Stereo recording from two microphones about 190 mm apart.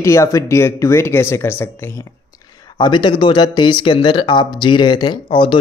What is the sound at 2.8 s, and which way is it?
Speech, 25° left (ahead or behind).